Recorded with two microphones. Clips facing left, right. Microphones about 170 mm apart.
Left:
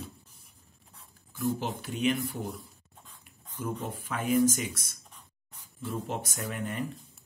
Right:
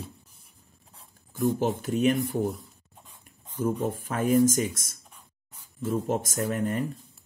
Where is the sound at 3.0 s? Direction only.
15° right (ahead or behind).